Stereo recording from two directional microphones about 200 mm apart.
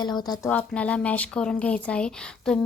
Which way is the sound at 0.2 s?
20° left (ahead or behind).